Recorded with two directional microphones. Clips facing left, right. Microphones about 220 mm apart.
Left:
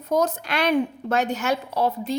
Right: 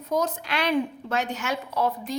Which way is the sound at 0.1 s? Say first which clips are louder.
Left 4 dB; 45° left (ahead or behind).